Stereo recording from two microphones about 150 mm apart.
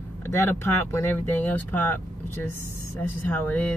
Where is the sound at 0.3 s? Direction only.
15° left (ahead or behind).